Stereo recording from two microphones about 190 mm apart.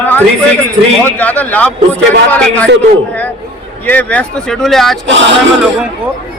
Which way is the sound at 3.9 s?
10° left (ahead or behind).